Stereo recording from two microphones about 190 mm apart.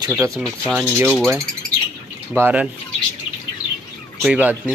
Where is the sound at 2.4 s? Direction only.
10° right (ahead or behind).